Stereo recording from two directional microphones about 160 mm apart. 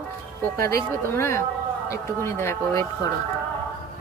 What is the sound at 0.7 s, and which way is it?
Speech, 15° left (ahead or behind).